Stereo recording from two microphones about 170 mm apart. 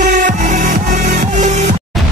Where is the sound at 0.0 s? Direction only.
50° right (ahead or behind).